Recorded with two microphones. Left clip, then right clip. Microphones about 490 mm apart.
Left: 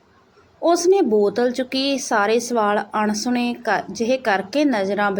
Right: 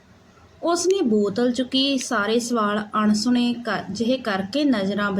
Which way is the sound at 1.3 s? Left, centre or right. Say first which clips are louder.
Left 2 dB; right.